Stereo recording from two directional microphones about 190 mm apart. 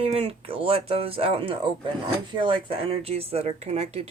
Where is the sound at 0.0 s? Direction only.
30° right (ahead or behind).